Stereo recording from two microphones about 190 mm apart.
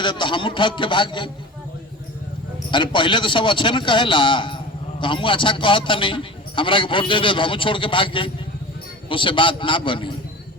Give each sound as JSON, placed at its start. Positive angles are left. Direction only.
{"t": 0.0, "sound": "a man's voice", "side_deg": 25}
{"t": 2.6, "sound": "a man's voice", "side_deg": 25}